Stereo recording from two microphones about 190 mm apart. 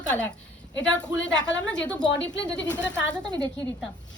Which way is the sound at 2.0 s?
70° left (ahead or behind).